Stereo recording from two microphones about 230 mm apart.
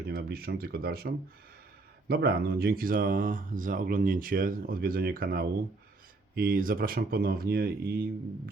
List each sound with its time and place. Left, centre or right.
0.0 s speech: right